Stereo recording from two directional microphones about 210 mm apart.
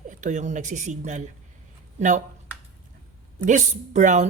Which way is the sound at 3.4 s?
35° right (ahead or behind).